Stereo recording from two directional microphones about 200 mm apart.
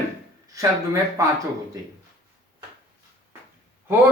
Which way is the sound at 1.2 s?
15° right (ahead or behind).